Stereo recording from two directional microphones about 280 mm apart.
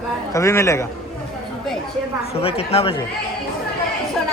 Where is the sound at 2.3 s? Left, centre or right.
Left.